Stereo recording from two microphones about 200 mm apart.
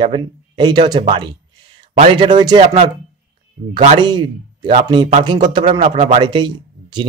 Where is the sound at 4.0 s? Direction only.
20° right (ahead or behind).